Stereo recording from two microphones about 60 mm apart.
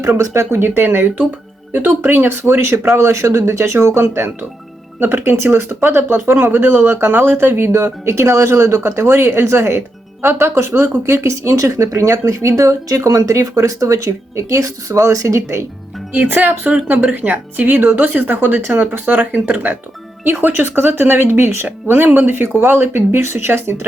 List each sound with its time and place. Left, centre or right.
0.0 s speech: right
16.1 s speech: right